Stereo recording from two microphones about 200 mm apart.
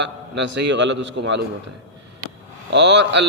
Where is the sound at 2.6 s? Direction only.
60° right (ahead or behind).